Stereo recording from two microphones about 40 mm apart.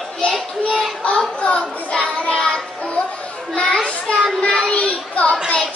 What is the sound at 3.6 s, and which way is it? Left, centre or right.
Children playing, left.